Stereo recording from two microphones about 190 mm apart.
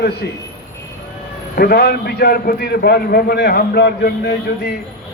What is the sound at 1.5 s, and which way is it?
A man's voice, 55° left (ahead or behind).